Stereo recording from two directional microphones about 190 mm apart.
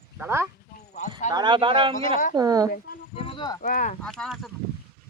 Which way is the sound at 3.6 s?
45° left (ahead or behind).